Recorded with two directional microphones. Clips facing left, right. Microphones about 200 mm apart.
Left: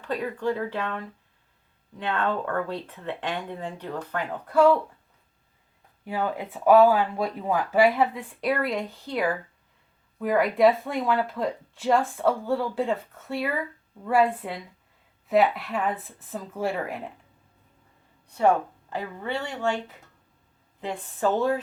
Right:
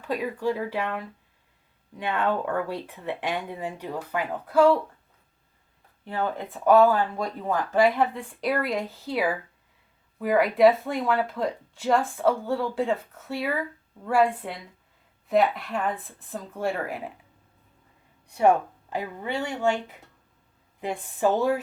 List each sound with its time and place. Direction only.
0.0 s speech: 10° right (ahead or behind)
6.1 s speech: 10° left (ahead or behind)
18.3 s speech: 15° right (ahead or behind)